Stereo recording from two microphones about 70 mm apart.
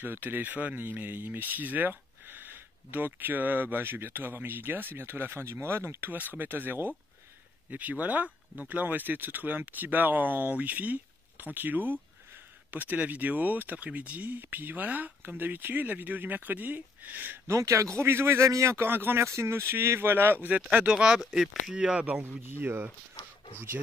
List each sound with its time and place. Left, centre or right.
0.0 s speech: right
17.5 s a man's voice: right
20.7 s speech: centre
22.2 s a man's voice: right